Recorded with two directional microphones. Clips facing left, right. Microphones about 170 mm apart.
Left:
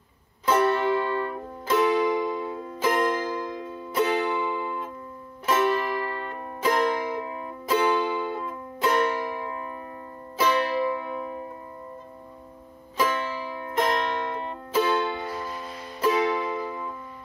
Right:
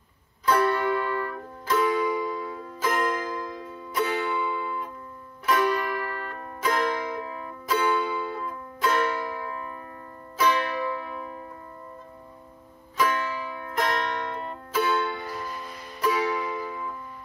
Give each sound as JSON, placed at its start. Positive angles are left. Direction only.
{"t": 0.5, "sound": "music", "side_deg": 25}
{"t": 13.0, "sound": "music", "side_deg": 25}